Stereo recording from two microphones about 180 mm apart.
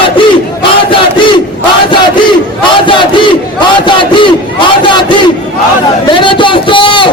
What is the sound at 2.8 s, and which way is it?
Battle cry, 30° left (ahead or behind).